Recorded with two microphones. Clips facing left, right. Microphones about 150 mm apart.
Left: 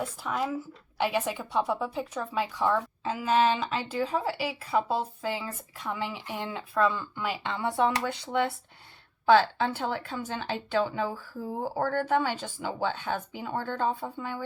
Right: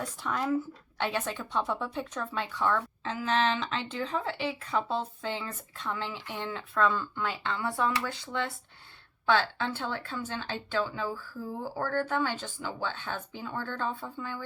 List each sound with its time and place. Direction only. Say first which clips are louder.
0.0 s a woman's voice: left 1 dB; 10° left (ahead or behind)